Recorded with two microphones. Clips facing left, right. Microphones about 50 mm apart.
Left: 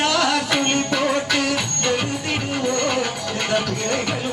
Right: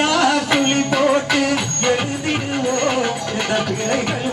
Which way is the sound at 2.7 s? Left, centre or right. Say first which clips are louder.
Right 4 dB; right.